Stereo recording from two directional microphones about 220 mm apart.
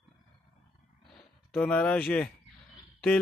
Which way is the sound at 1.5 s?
5° left (ahead or behind).